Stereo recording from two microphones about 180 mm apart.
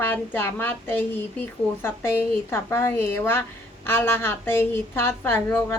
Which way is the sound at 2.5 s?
15° left (ahead or behind).